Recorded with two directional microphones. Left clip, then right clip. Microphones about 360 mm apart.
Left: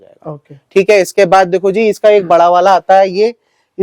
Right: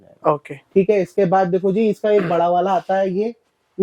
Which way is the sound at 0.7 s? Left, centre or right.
Centre.